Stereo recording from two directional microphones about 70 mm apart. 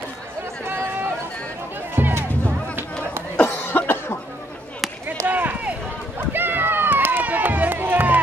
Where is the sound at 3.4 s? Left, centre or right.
Left.